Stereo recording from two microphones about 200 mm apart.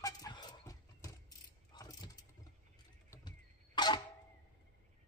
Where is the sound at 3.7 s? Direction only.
20° left (ahead or behind).